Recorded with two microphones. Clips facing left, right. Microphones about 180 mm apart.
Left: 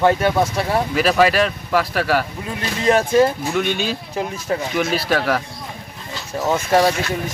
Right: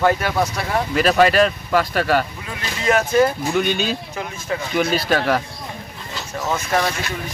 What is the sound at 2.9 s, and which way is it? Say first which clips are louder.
Speech: left 2 dB; 30° left (ahead or behind).